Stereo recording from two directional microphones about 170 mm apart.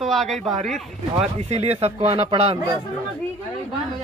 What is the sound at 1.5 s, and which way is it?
Speech, 35° right (ahead or behind).